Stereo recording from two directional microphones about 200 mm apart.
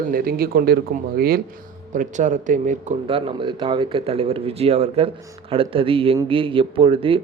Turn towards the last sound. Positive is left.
turn(degrees=-25)  # may be behind; listen again after turning